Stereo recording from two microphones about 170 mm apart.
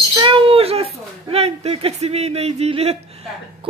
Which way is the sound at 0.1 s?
30° right (ahead or behind).